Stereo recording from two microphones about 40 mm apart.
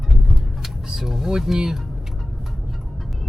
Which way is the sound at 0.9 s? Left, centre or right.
Centre.